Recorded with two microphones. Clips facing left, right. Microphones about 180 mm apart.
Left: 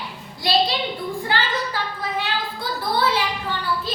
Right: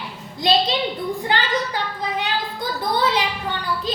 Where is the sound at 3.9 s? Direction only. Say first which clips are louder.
Right 6 dB; 15° right (ahead or behind).